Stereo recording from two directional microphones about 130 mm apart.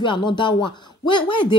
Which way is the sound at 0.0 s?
40° left (ahead or behind).